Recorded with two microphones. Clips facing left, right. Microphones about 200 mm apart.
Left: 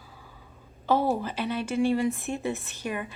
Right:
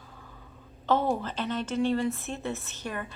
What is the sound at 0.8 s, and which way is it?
Speech, 10° left (ahead or behind).